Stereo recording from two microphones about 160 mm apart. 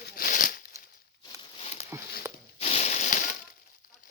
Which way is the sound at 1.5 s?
45° left (ahead or behind).